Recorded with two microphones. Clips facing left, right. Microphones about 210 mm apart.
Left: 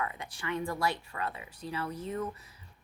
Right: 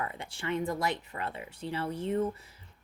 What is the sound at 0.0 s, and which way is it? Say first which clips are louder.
A woman's voice: right 1 dB; 30° right (ahead or behind).